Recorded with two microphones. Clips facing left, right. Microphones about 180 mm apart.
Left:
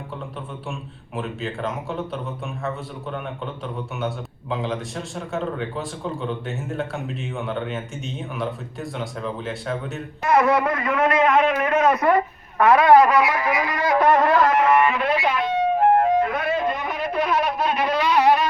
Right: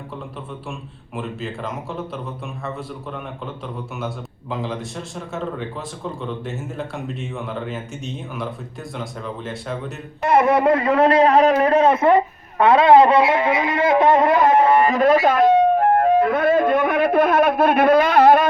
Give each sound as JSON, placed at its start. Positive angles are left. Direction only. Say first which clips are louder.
{"t": 0.7, "sound": "a man's voice", "louder": "even", "side_deg": 0}
{"t": 10.2, "sound": "a man's voice", "louder": "right 3 dB", "side_deg": -25}